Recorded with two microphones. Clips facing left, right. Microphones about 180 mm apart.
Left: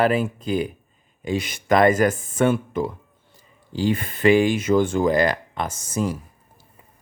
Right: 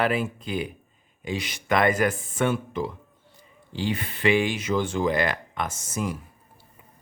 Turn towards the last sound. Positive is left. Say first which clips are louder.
# left 5 dB
turn(degrees=35)  # may be behind; listen again after turning